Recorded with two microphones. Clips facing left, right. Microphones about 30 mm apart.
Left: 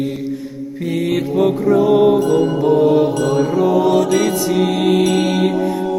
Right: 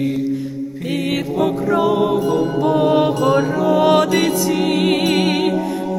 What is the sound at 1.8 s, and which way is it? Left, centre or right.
Music, centre.